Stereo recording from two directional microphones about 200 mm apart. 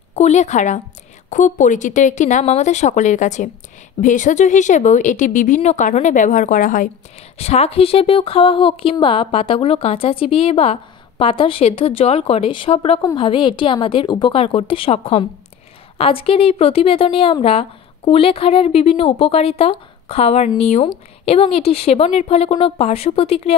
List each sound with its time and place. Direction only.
0.1 s a woman's voice: 35° left (ahead or behind)